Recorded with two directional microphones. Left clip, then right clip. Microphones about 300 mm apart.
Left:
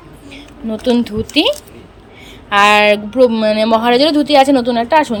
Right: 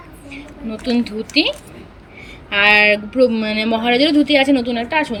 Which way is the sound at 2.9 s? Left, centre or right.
Centre.